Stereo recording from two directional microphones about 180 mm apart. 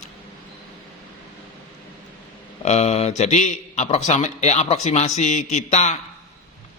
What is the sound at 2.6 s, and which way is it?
Speech, 35° left (ahead or behind).